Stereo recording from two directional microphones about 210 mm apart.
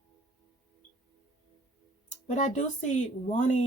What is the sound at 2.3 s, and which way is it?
Speech, 35° left (ahead or behind).